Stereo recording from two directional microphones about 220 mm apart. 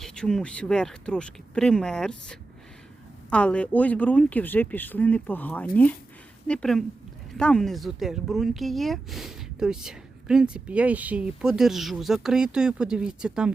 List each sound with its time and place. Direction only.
0.0 s speech: 5° left (ahead or behind)